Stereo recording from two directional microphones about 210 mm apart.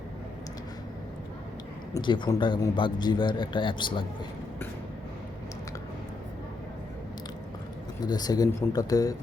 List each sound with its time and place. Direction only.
1.9 s speech: 20° left (ahead or behind)
8.0 s speech: 20° left (ahead or behind)